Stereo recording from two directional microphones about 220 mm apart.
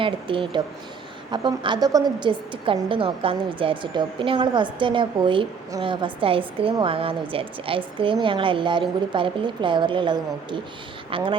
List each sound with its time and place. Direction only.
0.0 s a woman's voice: 25° right (ahead or behind)